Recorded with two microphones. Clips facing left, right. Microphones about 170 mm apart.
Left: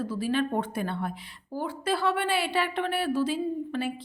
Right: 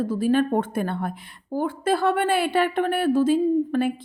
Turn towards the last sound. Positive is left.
turn(degrees=-50)  # may be behind; listen again after turning